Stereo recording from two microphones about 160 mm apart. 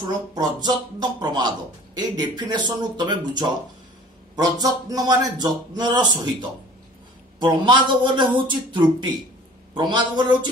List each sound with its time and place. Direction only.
0.0 s a man's voice: 25° right (ahead or behind)